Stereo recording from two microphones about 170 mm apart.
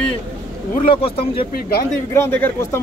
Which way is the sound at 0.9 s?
35° left (ahead or behind).